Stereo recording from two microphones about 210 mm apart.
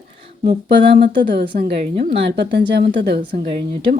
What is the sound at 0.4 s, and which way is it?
A woman's voice, 40° right (ahead or behind).